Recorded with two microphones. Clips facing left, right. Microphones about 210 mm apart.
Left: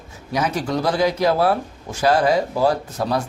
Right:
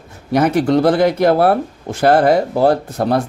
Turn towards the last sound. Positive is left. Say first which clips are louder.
# right 6 dB
turn(degrees=-55)  # may be behind; listen again after turning